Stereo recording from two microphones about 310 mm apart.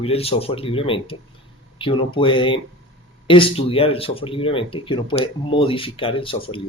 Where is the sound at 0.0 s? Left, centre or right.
Centre.